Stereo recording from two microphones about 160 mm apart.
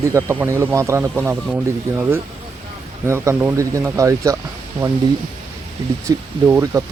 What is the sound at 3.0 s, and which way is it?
Speech, 15° right (ahead or behind).